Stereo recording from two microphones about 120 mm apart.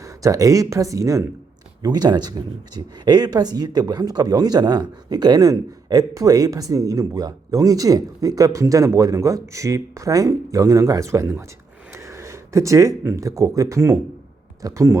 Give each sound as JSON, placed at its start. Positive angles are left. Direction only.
{"t": 0.0, "sound": "speech", "side_deg": -30}